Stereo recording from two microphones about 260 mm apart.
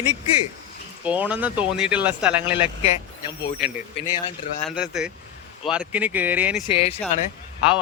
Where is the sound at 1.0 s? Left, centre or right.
Centre.